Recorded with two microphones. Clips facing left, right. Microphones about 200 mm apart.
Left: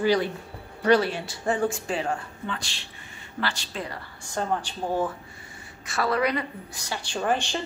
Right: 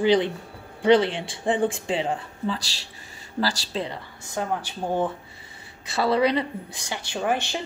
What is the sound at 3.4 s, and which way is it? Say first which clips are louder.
Speech: right 5 dB; 25° right (ahead or behind).